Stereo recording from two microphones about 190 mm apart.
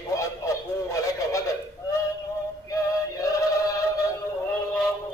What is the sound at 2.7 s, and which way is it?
Male singing, 15° left (ahead or behind).